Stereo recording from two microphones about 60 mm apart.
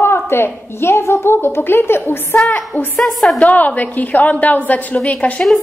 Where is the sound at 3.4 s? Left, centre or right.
Left.